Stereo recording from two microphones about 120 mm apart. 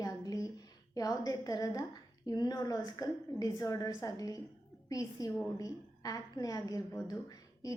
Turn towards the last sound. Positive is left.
turn(degrees=30)  # may be behind; listen again after turning